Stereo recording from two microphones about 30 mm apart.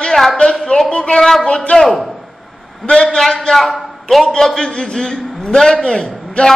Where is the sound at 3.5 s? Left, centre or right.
Centre.